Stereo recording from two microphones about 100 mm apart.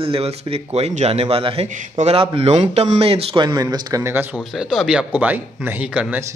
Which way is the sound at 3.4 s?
40° right (ahead or behind).